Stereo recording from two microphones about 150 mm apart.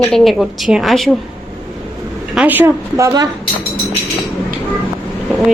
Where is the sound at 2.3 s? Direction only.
10° right (ahead or behind).